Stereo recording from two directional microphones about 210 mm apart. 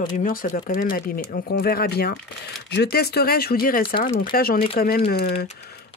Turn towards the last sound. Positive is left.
turn(degrees=50)  # may be behind; listen again after turning